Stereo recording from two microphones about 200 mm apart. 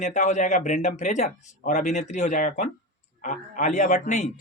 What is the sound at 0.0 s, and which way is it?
Speech, 35° left (ahead or behind).